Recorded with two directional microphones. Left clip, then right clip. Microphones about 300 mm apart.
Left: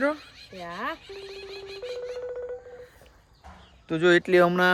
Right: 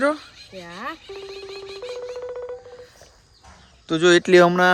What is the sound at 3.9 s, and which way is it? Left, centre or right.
Speech, centre.